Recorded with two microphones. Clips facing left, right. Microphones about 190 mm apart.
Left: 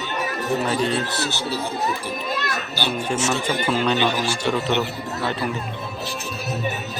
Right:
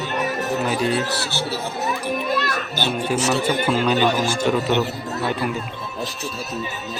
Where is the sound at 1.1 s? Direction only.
15° left (ahead or behind).